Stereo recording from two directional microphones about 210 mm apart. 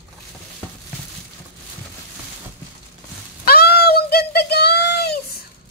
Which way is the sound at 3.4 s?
45° left (ahead or behind).